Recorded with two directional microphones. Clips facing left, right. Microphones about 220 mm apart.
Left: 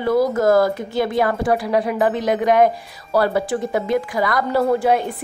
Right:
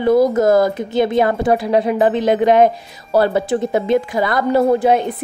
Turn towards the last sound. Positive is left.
turn(degrees=-20)  # may be behind; listen again after turning